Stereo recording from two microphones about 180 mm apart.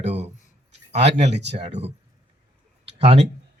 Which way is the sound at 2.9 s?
35° right (ahead or behind).